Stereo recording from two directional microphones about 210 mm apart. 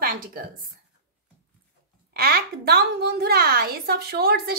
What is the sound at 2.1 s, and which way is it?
A woman's voice, 45° right (ahead or behind).